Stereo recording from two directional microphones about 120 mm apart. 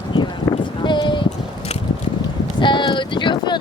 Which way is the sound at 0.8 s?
40° left (ahead or behind).